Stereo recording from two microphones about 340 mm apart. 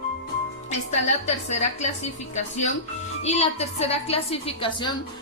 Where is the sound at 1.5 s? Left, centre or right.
Centre.